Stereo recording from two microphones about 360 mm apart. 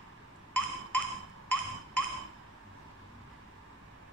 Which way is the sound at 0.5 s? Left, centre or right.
Centre.